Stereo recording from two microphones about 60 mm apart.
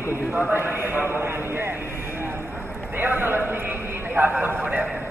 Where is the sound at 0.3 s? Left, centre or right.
Right.